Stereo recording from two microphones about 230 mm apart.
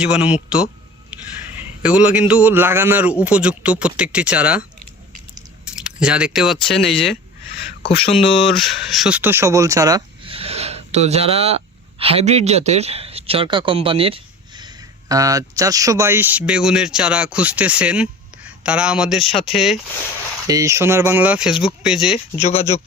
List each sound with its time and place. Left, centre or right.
0.0 s a man's voice: centre
1.5 s a man's voice: centre
5.6 s a man's voice: centre
20.5 s a man's voice: centre
22.4 s speech: left